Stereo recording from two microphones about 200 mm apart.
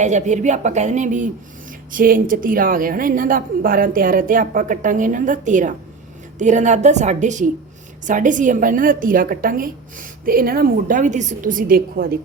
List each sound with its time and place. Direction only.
0.0 s a woman's voice: 35° right (ahead or behind)